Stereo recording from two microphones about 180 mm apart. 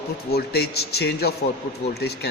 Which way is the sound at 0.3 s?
60° left (ahead or behind).